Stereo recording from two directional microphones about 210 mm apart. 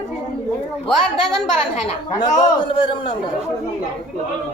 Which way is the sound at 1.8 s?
25° left (ahead or behind).